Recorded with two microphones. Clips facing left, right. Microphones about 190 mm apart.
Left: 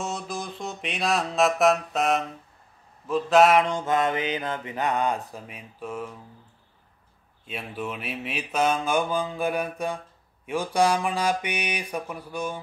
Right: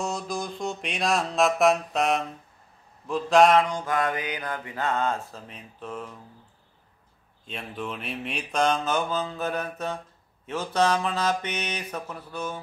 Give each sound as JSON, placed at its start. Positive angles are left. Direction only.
{"t": 0.0, "sound": "music", "side_deg": 0}
{"t": 3.1, "sound": "a sound", "side_deg": 0}
{"t": 3.6, "sound": "mantra", "side_deg": 25}
{"t": 7.4, "sound": "mantra", "side_deg": 5}